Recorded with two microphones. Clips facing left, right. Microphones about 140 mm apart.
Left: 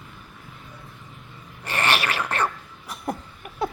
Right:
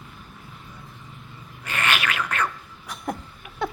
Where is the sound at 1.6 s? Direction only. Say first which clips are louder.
Left 2 dB; 35° left (ahead or behind).